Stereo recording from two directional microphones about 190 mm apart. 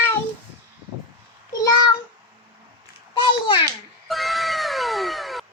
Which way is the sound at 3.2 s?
25° left (ahead or behind).